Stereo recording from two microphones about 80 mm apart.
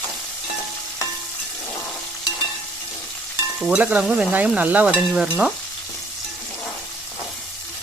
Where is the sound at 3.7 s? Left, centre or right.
Centre.